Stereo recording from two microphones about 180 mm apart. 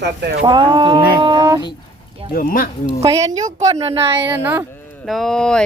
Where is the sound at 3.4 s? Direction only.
40° right (ahead or behind).